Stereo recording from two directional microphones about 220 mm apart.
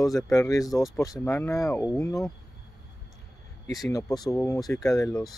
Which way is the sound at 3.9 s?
15° left (ahead or behind).